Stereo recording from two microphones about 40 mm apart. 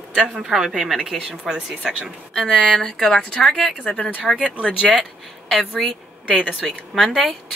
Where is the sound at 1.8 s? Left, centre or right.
Centre.